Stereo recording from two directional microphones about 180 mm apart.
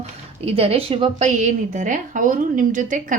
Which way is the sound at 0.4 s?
35° right (ahead or behind).